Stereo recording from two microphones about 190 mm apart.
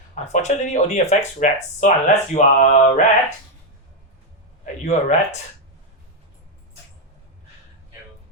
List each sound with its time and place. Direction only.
0.1 s speech: 40° left (ahead or behind)
4.6 s speech: 40° left (ahead or behind)